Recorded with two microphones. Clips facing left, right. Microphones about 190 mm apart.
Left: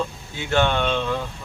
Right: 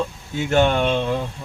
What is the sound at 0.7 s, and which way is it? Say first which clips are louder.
Speech: right 3 dB; 40° right (ahead or behind).